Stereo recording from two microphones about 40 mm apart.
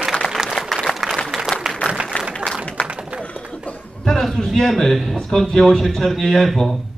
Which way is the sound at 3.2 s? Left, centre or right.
Left.